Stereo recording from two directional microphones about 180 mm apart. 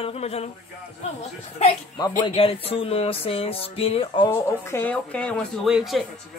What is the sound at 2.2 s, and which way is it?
Speech, 30° left (ahead or behind).